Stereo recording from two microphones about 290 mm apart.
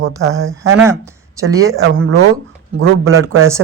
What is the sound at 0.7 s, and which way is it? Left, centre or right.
Speech, centre.